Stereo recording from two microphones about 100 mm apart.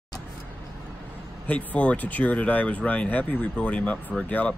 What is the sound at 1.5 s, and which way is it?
Speech, 15° left (ahead or behind).